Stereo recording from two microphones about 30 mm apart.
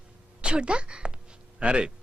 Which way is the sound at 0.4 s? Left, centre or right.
Right.